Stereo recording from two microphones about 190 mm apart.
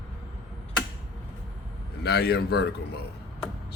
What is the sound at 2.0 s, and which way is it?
Speech, 60° left (ahead or behind).